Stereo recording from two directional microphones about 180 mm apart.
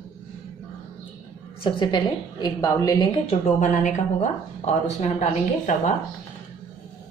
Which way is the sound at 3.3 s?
45° left (ahead or behind).